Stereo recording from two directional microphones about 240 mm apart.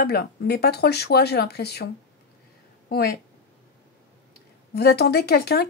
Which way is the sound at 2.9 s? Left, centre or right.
Left.